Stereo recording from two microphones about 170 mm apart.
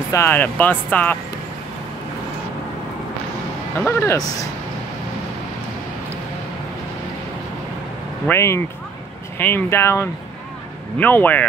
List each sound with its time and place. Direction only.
0.1 s speech: 15° left (ahead or behind)
3.8 s speech: 15° left (ahead or behind)
8.3 s speech: 15° left (ahead or behind)